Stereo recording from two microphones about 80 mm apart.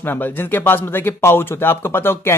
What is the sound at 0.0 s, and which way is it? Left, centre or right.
Speech, left.